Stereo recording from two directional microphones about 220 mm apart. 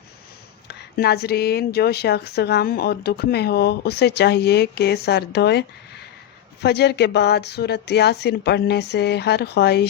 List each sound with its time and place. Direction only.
0.7 s speech: 45° left (ahead or behind)